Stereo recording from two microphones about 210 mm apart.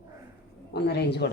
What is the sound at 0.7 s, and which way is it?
Speech, 55° left (ahead or behind).